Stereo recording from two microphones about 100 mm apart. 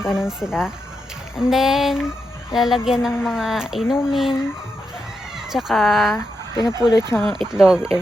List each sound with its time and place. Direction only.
0.0 s a woman's voice: 5° right (ahead or behind)
5.5 s a woman's voice: 5° right (ahead or behind)
6.6 s speech: 35° left (ahead or behind)
7.2 s a woman's voice: 5° left (ahead or behind)
7.5 s a woman's voice: 5° right (ahead or behind)